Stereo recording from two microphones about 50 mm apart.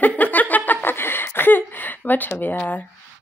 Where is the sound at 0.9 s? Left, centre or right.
Left.